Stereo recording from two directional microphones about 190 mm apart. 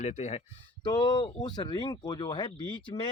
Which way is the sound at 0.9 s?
20° left (ahead or behind).